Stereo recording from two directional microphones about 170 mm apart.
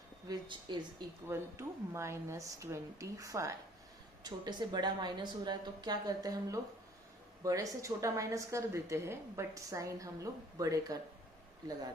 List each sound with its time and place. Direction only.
0.3 s speech: 25° right (ahead or behind)
1.3 s a woman's voice: 15° right (ahead or behind)